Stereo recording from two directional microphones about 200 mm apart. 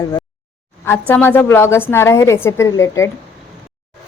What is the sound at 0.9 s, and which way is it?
Speech, 10° left (ahead or behind).